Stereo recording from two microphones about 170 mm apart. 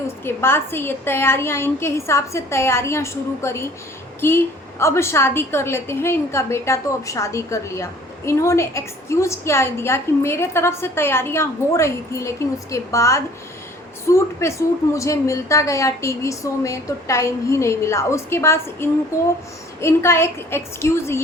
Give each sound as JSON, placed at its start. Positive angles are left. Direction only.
{"t": 0.3, "sound": "a woman's voice", "side_deg": 15}